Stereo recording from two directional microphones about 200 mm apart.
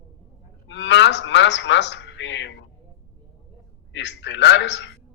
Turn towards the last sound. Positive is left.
turn(degrees=60)  # may be behind; listen again after turning